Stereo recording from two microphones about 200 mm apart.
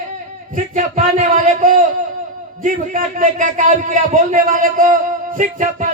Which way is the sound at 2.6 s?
40° right (ahead or behind).